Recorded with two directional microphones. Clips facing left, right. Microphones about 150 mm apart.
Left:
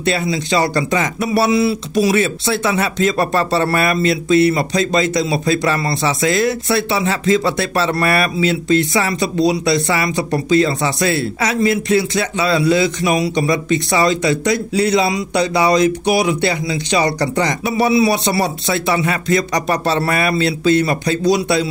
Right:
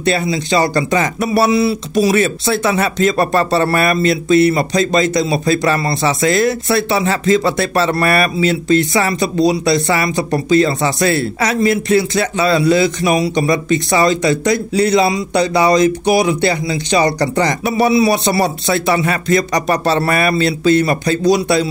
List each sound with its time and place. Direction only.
0.3 s speech: 35° right (ahead or behind)
1.5 s speech: 35° right (ahead or behind)
2.1 s speech: 45° right (ahead or behind)